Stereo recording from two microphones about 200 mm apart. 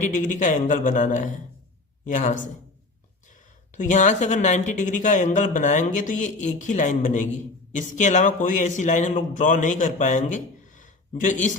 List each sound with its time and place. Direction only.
0.0 s a man's voice: 40° left (ahead or behind)
3.8 s a man's voice: 40° left (ahead or behind)